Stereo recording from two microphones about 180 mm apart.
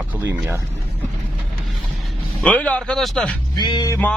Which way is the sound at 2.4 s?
10° left (ahead or behind).